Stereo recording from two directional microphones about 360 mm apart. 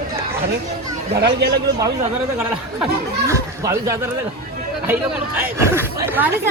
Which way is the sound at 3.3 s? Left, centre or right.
Centre.